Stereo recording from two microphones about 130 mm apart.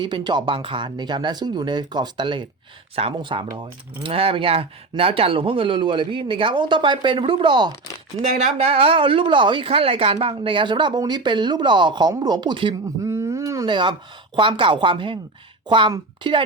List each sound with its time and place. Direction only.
0.0 s speech: 35° right (ahead or behind)
8.2 s speech: 55° right (ahead or behind); by 12.7 s 35° right (ahead or behind)
13.1 s a sound: 20° right (ahead or behind)
13.7 s a woman's voice: 35° right (ahead or behind)